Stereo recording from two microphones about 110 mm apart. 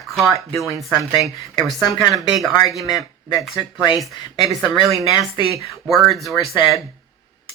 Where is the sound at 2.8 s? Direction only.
35° left (ahead or behind).